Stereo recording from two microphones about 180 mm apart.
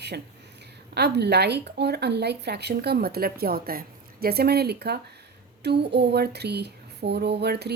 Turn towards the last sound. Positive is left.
turn(degrees=-65)  # may be behind; listen again after turning